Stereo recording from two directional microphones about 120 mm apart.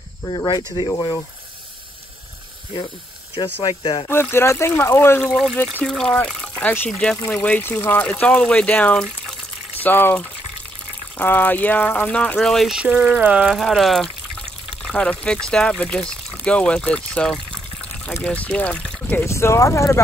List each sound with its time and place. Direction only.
0.2 s speech: 40° left (ahead or behind)
3.6 s speech: 40° left (ahead or behind)
4.1 s speech: 20° left (ahead or behind)
5.2 s speech: 5° left (ahead or behind)
13.5 s speech: centre (ahead or behind); by 20.0 s 25° left (ahead or behind)